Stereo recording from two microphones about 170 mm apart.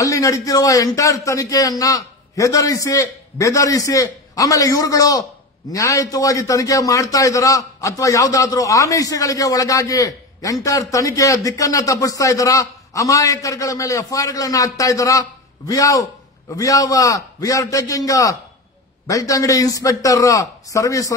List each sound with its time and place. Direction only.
0.0 s a man's voice: 20° left (ahead or behind)